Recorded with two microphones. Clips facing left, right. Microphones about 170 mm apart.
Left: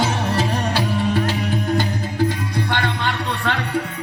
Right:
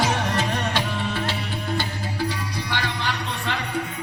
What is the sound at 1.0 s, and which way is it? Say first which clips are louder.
Music: left 7 dB; 40° left (ahead or behind).